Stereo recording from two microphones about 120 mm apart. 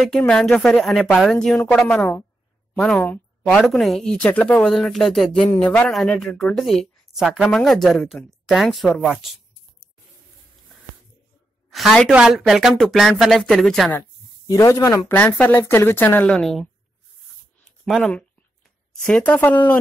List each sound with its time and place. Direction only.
0.4 s a woman's voice: 5° left (ahead or behind)
3.5 s a woman's voice: 5° left (ahead or behind)
11.7 s a woman's voice: centre (ahead or behind)
12.1 s a woman's voice: 10° right (ahead or behind)
14.5 s speech: 25° left (ahead or behind)
15.1 s a woman's voice: 15° left (ahead or behind)
16.3 s a woman's voice: centre (ahead or behind)
17.8 s a woman's voice: centre (ahead or behind)